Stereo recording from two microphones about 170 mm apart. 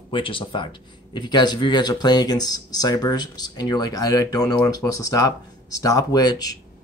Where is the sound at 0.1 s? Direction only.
30° left (ahead or behind).